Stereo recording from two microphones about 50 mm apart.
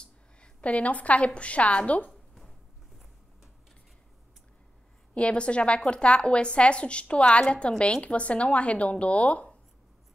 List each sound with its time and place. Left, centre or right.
0.0 s a woman's voice: left
2.0 s a sound: centre
5.1 s a woman's voice: left